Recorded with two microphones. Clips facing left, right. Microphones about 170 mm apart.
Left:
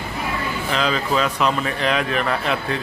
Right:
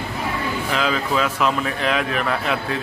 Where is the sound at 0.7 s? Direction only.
5° right (ahead or behind).